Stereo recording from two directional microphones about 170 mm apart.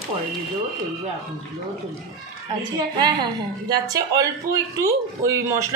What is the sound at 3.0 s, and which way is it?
A man's voice, 25° right (ahead or behind).